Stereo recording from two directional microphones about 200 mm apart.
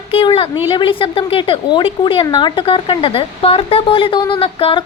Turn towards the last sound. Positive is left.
turn(degrees=25)  # may be behind; listen again after turning